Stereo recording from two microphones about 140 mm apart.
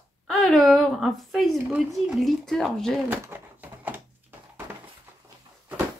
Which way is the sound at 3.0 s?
10° right (ahead or behind).